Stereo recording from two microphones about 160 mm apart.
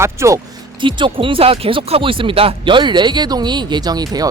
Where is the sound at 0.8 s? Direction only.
30° right (ahead or behind).